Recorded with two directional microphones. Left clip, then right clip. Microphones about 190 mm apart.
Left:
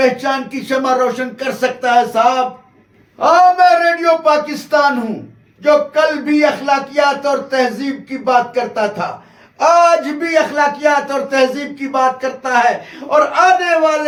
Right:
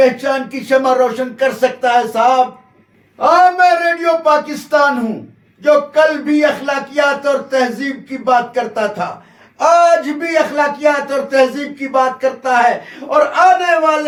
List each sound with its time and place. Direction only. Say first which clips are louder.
0.0 s a man's voice: right 2 dB; 20° left (ahead or behind)